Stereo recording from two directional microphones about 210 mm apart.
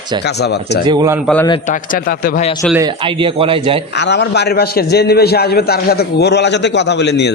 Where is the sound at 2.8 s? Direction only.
25° right (ahead or behind).